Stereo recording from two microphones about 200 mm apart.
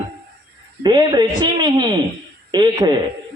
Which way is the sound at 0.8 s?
20° right (ahead or behind).